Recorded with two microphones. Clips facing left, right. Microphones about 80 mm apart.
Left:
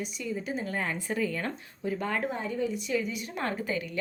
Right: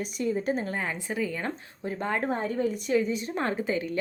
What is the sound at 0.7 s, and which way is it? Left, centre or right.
Speech, centre.